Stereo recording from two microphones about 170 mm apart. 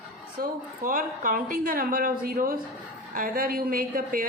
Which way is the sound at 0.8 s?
55° right (ahead or behind).